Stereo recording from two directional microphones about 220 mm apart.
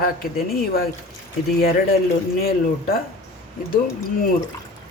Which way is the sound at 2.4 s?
45° left (ahead or behind).